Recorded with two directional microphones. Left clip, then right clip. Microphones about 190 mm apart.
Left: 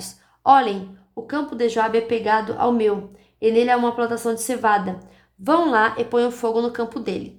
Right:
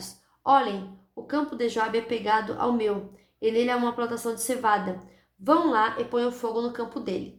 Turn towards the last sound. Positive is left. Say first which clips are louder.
# left 6 dB
turn(degrees=45)  # may be behind; listen again after turning